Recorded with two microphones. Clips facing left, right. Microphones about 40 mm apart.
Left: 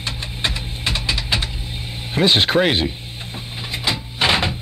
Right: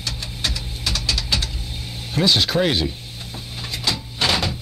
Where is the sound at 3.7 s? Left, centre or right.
Left.